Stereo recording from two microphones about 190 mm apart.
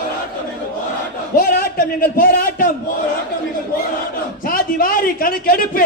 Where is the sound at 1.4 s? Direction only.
50° left (ahead or behind).